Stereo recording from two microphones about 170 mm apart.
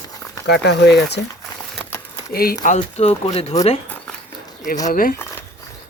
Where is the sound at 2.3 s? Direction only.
60° left (ahead or behind); by 3.5 s 35° left (ahead or behind).